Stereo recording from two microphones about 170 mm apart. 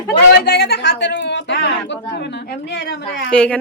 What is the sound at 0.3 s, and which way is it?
Speech, 70° left (ahead or behind).